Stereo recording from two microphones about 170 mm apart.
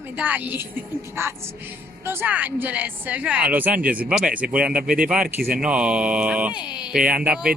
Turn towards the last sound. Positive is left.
turn(degrees=-5)  # may be behind; listen again after turning